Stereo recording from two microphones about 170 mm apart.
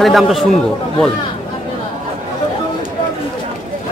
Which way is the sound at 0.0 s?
Centre (ahead or behind).